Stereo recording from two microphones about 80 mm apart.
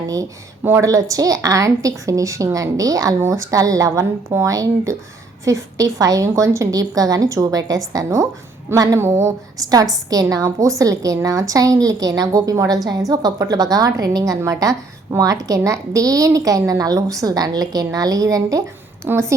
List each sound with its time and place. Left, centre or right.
0.8 s a woman's voice: right
19.0 s speech: right